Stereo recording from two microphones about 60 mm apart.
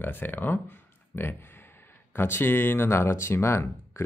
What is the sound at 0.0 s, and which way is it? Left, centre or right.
Speech, left.